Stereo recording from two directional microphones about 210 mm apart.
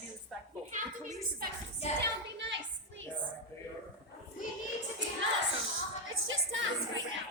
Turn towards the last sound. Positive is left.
turn(degrees=-70)  # may be behind; listen again after turning